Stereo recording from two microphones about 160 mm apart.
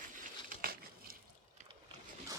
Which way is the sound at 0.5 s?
65° right (ahead or behind).